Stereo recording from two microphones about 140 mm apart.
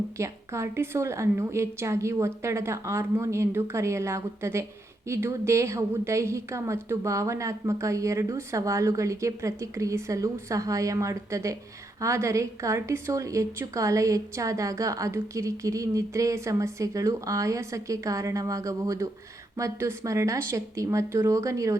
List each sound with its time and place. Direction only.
0.2 s a woman's voice: 20° right (ahead or behind)